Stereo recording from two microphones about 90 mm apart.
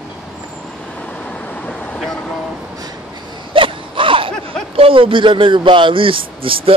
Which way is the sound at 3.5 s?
75° right (ahead or behind).